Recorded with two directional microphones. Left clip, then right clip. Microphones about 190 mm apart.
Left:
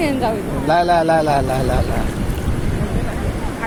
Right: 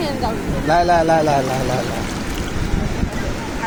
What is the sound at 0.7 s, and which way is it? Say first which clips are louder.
Speech: even; 10° left (ahead or behind).